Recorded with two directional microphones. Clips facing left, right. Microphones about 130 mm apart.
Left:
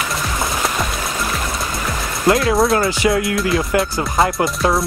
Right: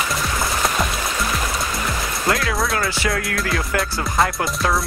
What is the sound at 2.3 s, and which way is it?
Music, 25° left (ahead or behind).